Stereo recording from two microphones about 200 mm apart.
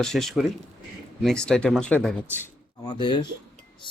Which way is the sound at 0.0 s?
Centre (ahead or behind).